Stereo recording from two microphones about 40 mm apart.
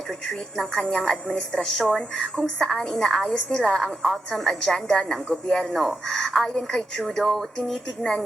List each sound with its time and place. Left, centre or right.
0.7 s a woman's voice: left
1.4 s a woman's voice: centre
4.6 s a woman's voice: centre